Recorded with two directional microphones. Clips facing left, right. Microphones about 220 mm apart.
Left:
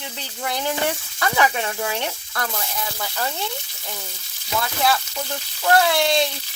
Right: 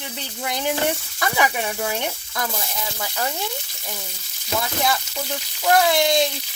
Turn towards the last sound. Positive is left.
turn(degrees=-20)  # may be behind; listen again after turning